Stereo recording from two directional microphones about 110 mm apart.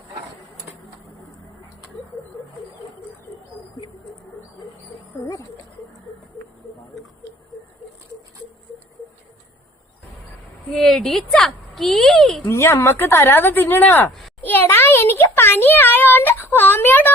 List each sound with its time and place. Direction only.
10.7 s speech: 5° left (ahead or behind)
12.5 s a child's voice: 25° left (ahead or behind)